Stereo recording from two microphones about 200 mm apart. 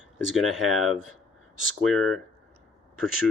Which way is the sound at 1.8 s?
Centre (ahead or behind).